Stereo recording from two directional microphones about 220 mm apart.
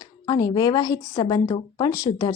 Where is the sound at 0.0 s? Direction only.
15° left (ahead or behind).